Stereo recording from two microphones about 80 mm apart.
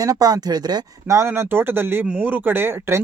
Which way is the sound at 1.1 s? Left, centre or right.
Right.